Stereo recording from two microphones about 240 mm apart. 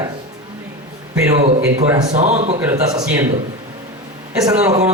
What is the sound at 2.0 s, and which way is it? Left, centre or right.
Speech, right.